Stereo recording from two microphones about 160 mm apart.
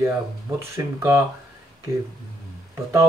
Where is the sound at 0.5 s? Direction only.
15° right (ahead or behind).